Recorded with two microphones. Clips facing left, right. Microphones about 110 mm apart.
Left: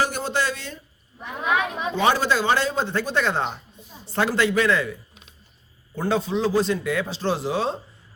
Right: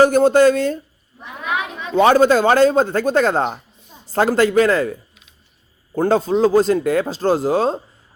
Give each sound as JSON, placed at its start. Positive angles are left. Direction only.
{"t": 0.0, "sound": "a man's voice", "side_deg": -50}
{"t": 2.0, "sound": "a man's voice", "side_deg": -50}